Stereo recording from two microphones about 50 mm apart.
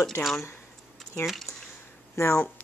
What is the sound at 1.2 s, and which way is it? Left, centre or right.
Speech, centre.